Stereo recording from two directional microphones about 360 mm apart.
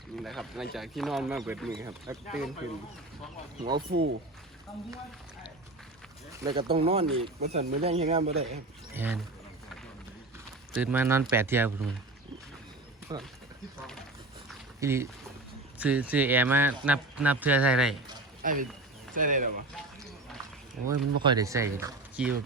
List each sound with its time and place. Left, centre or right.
0.2 s speech: centre
3.6 s speech: right
6.3 s speech: centre
8.9 s speech: centre
10.7 s speech: centre
13.1 s speech: centre
13.7 s speech: centre
18.4 s speech: right
20.8 s speech: centre